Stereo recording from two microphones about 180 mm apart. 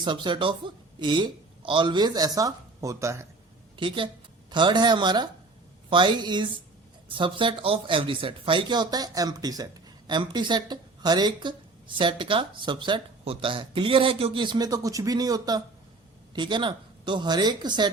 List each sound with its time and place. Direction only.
0.0 s speech: 25° right (ahead or behind)
3.8 s speech: 25° right (ahead or behind)